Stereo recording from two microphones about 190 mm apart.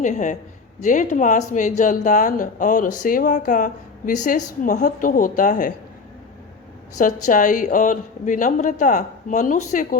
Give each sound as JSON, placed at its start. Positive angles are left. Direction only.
{"t": 0.0, "sound": "a man's voice", "side_deg": 40}
{"t": 7.0, "sound": "a woman's voice", "side_deg": 45}